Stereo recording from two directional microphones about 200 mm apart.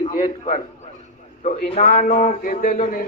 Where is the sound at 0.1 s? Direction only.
35° left (ahead or behind).